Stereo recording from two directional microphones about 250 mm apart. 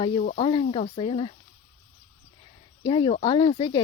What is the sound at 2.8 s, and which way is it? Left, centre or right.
Speech, centre.